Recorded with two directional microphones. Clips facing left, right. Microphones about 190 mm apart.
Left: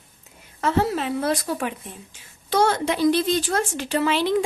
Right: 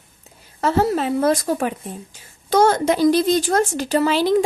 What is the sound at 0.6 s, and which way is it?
A woman's voice, 40° right (ahead or behind).